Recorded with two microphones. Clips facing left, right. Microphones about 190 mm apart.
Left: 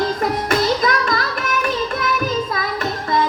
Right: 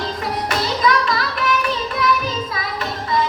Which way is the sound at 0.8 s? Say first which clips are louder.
Right 2 dB; 45° left (ahead or behind).